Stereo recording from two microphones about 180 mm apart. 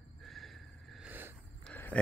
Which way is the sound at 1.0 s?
10° right (ahead or behind).